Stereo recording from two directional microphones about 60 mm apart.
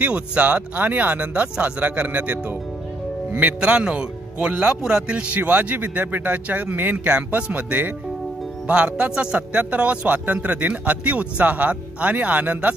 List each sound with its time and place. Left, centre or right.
0.0 s a man's voice: right
3.3 s a man's voice: right